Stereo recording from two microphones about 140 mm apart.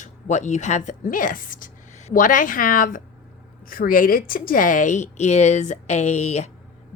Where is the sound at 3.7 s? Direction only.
90° left.